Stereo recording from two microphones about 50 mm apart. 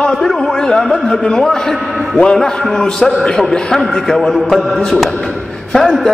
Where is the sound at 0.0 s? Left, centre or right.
Centre.